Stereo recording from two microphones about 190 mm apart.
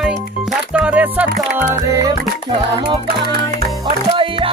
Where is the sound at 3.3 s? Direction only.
55° right (ahead or behind).